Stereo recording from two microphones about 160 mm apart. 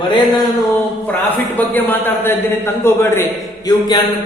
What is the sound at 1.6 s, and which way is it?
A man's voice, 10° left (ahead or behind).